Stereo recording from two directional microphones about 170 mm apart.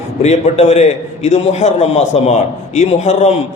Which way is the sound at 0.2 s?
40° left (ahead or behind).